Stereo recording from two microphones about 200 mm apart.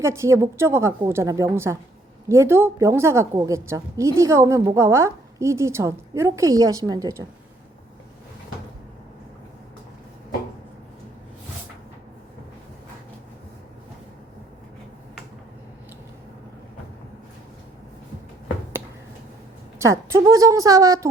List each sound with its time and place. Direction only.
0.0 s a woman's voice: 15° right (ahead or behind)
19.8 s a woman's voice: 15° right (ahead or behind)